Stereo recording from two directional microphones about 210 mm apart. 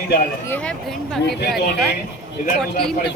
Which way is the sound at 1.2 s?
50° left (ahead or behind).